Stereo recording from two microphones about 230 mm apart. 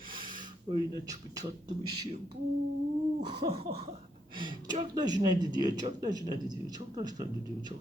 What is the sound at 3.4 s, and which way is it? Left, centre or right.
Speech, right.